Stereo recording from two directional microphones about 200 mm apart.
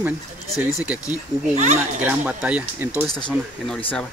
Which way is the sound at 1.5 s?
35° right (ahead or behind).